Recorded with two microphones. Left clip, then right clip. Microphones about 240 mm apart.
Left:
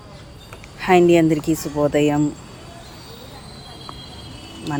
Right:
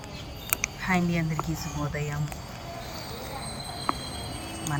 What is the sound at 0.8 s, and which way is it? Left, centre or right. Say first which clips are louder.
Speech: left 18 dB; left.